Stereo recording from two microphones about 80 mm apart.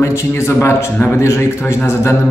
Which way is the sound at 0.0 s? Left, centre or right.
Left.